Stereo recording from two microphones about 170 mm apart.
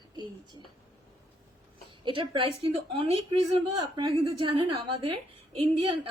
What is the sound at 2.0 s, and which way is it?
A woman's voice, 30° right (ahead or behind).